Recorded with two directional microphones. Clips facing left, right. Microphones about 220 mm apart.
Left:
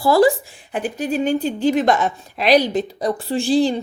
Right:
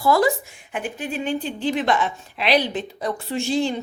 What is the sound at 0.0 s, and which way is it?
A woman's voice, 30° left (ahead or behind).